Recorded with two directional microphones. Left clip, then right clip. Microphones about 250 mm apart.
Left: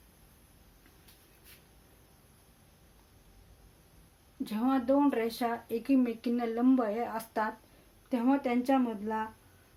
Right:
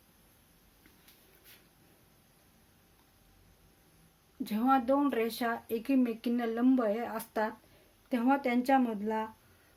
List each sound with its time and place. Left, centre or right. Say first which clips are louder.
4.4 s speech: right 2 dB; right